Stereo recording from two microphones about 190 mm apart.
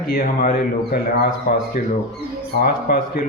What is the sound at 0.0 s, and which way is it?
A man's voice, 50° left (ahead or behind).